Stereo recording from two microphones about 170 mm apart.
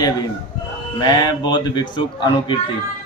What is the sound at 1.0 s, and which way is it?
A man's voice, 25° left (ahead or behind).